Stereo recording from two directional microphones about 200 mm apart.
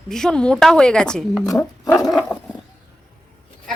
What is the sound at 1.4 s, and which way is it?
Speech, 15° left (ahead or behind).